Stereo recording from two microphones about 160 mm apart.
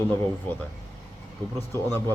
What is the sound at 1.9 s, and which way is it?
Speech, 20° right (ahead or behind).